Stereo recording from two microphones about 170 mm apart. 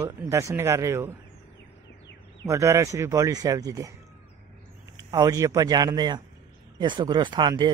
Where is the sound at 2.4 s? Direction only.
15° right (ahead or behind).